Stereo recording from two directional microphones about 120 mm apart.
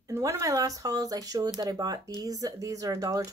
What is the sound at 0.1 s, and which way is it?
Speech, 25° right (ahead or behind).